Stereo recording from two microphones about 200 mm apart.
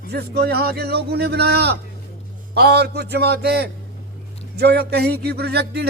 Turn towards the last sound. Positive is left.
turn(degrees=-55)  # may be behind; listen again after turning